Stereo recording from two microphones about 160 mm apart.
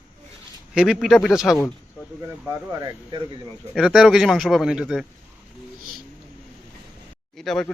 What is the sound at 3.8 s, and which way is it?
Speech, centre (ahead or behind).